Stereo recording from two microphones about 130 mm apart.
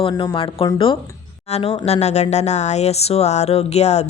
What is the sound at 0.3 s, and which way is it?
Speech, 40° left (ahead or behind).